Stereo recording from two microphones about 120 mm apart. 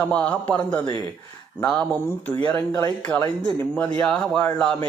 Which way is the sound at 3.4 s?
10° left (ahead or behind).